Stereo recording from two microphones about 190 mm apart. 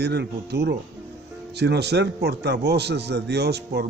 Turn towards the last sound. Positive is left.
turn(degrees=-60)  # may be behind; listen again after turning